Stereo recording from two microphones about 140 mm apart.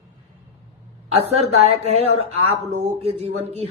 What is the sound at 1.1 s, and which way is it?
Speech, 50° right (ahead or behind).